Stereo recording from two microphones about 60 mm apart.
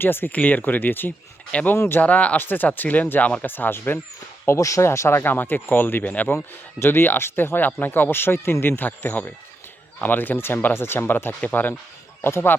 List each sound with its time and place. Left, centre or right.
0.0 s speech: left
1.5 s speech: centre; by 4.0 s left
4.4 s speech: left
4.9 s speech: left
6.3 s speech: left